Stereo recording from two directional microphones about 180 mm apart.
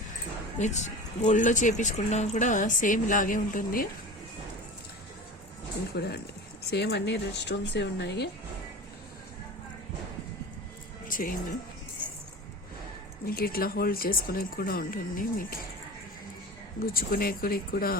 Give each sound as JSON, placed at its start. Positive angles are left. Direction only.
{"t": 0.6, "sound": "speech", "side_deg": 40}
{"t": 5.9, "sound": "speech", "side_deg": 65}
{"t": 11.1, "sound": "speech", "side_deg": 50}
{"t": 13.2, "sound": "speech", "side_deg": 55}
{"t": 16.8, "sound": "speech", "side_deg": 55}